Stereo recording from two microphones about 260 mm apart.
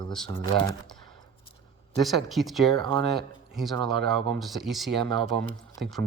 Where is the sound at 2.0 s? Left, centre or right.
Centre.